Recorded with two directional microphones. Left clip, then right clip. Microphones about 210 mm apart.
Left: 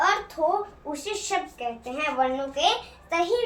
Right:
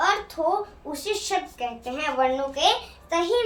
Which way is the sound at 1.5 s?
20° right (ahead or behind).